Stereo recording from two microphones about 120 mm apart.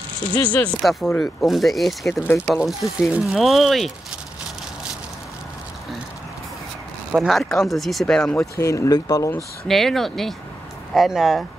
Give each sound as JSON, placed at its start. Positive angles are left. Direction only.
{"t": 0.3, "sound": "speech", "side_deg": 15}
{"t": 1.2, "sound": "speech", "side_deg": 0}
{"t": 2.0, "sound": "speech", "side_deg": 20}
{"t": 2.4, "sound": "speech", "side_deg": 0}
{"t": 7.1, "sound": "speech", "side_deg": 0}
{"t": 8.4, "sound": "speech", "side_deg": 25}
{"t": 9.7, "sound": "speech", "side_deg": 0}